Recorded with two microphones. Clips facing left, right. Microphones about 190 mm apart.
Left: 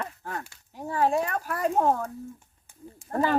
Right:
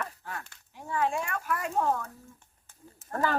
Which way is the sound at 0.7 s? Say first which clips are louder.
Left 5 dB; 40° left (ahead or behind).